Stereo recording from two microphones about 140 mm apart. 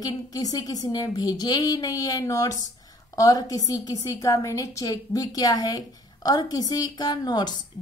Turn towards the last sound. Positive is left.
turn(degrees=30)  # may be behind; listen again after turning